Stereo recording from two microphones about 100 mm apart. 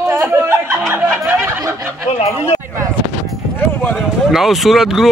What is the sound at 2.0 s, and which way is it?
Speech, 90° left.